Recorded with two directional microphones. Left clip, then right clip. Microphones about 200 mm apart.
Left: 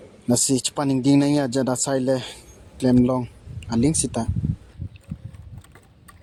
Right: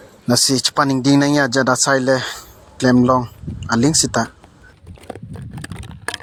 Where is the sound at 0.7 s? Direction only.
10° right (ahead or behind).